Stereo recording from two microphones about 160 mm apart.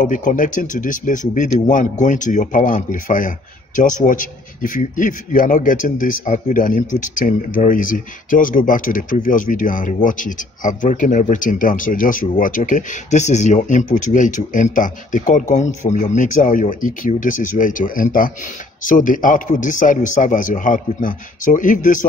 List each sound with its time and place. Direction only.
0.0 s speech: 55° left (ahead or behind)